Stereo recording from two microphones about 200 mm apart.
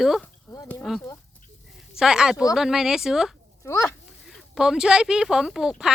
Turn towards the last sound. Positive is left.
turn(degrees=0)  # may be behind; listen again after turning